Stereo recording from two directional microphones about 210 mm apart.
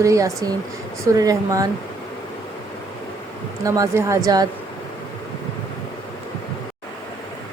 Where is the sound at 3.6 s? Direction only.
15° right (ahead or behind).